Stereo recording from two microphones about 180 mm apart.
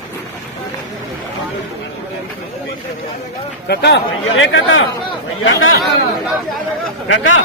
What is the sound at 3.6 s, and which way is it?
Speech, 70° left (ahead or behind).